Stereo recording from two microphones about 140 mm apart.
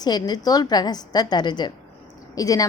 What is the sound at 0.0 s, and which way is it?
A woman's voice, 30° left (ahead or behind).